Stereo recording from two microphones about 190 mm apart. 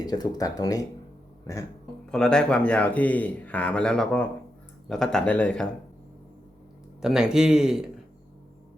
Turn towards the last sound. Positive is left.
turn(degrees=-5)  # may be behind; listen again after turning